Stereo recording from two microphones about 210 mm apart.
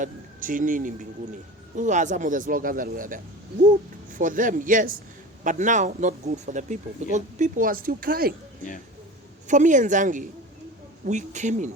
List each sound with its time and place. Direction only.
0.0 s speech: 40° right (ahead or behind)
9.5 s speech: 35° right (ahead or behind)